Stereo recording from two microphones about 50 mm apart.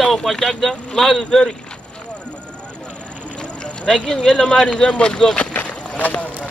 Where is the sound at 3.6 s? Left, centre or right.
Centre.